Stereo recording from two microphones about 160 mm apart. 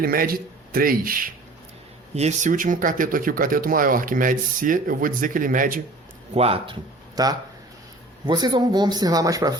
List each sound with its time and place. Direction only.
0.0 s speech: 65° right (ahead or behind)
2.1 s speech: 45° right (ahead or behind)
6.3 s a man's voice: 35° right (ahead or behind)
7.2 s speech: 25° right (ahead or behind)